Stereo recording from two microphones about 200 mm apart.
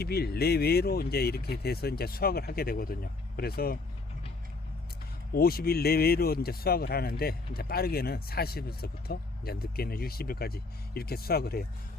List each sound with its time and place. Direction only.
0.0 s speech: 50° left (ahead or behind)
5.3 s speech: 50° left (ahead or behind)